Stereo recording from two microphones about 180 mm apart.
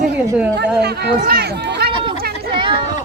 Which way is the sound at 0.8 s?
65° right (ahead or behind).